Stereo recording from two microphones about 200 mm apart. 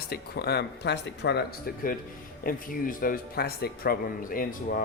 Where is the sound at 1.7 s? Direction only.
50° left (ahead or behind).